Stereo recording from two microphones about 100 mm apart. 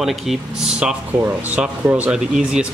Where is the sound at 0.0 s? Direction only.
Centre (ahead or behind).